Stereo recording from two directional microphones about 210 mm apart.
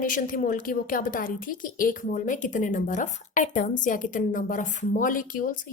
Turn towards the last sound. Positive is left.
turn(degrees=40)  # may be behind; listen again after turning